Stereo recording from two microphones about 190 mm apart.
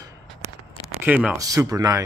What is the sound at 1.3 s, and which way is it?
Speech, 20° right (ahead or behind).